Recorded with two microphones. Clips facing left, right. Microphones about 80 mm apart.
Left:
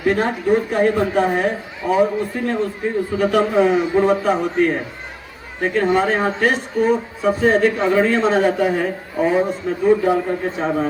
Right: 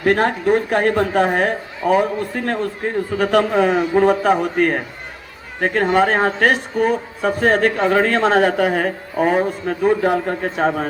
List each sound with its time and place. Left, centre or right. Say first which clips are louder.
0.0 s a man's voice: right 2 dB; right